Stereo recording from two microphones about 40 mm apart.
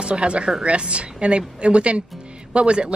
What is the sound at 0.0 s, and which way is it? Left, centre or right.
A woman's voice, right.